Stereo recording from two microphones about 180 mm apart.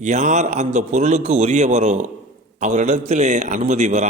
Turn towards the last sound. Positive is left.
turn(degrees=-40)  # may be behind; listen again after turning